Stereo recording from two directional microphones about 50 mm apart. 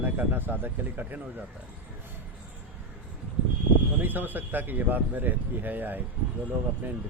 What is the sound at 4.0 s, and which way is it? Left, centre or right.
Speech, right.